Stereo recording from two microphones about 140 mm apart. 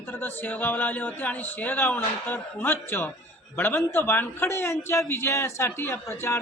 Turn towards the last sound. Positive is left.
turn(degrees=20)  # may be behind; listen again after turning